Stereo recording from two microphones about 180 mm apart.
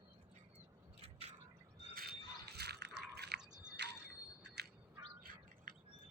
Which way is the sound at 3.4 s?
5° right (ahead or behind).